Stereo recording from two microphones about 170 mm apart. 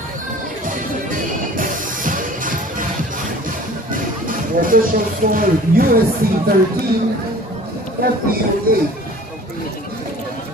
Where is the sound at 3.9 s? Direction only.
55° right (ahead or behind).